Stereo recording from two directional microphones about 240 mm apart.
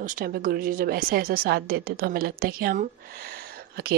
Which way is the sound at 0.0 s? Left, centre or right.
Right.